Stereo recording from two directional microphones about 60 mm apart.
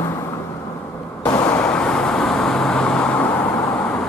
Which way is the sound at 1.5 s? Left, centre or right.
Centre.